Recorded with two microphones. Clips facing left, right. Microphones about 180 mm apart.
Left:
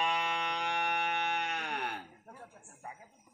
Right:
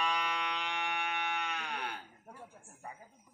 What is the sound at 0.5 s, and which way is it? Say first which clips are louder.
Music: left 4 dB; 45° left (ahead or behind).